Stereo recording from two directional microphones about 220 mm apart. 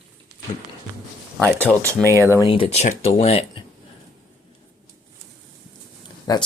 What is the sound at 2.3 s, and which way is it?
Speech, 20° left (ahead or behind).